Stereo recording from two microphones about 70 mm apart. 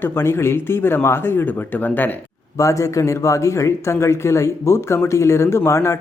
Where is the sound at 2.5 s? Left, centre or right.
Left.